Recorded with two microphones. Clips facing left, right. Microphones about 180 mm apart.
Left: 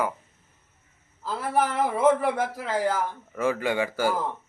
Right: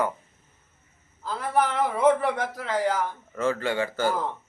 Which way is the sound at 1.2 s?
5° left (ahead or behind).